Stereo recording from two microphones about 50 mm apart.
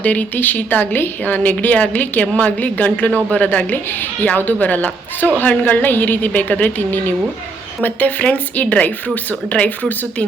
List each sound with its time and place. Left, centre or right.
0.0 s a woman's voice: left